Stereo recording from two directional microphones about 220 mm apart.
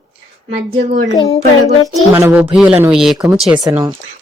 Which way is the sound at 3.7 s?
15° right (ahead or behind).